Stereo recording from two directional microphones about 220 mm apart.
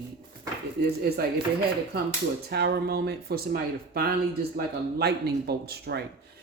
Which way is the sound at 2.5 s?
45° right (ahead or behind).